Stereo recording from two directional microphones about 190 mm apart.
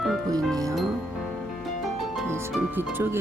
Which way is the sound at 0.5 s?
20° right (ahead or behind).